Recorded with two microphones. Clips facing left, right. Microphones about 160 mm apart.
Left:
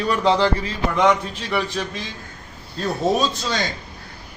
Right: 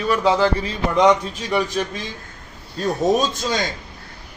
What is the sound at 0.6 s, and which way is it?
Speech, 20° right (ahead or behind).